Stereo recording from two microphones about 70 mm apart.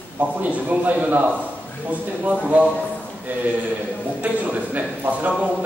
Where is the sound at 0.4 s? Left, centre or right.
Right.